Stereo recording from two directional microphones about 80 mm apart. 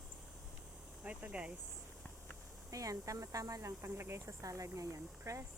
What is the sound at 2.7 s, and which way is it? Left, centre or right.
Speech, right.